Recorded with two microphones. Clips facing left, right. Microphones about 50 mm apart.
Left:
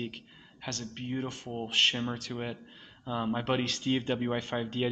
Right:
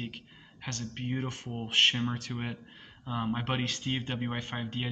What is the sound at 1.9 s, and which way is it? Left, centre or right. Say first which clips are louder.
Speech: right 1 dB; centre.